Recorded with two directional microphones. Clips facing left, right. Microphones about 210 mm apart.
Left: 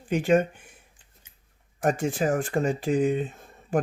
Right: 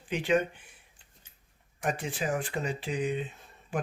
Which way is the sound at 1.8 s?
45° left (ahead or behind).